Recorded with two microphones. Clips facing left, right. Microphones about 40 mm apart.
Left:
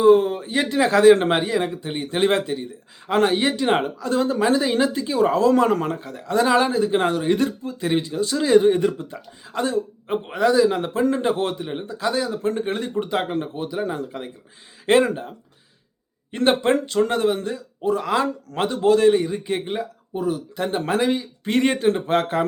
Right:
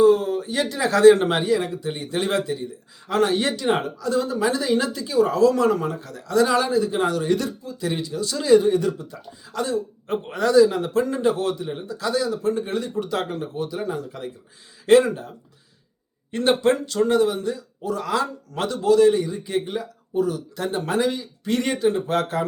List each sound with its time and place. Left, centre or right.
0.0 s speech: left
10.1 s a man's voice: centre
11.1 s speech: left
13.1 s speech: left
16.3 s speech: left
17.9 s speech: left